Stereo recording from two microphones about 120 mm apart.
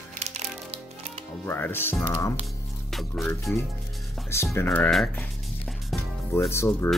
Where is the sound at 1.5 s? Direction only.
20° left (ahead or behind).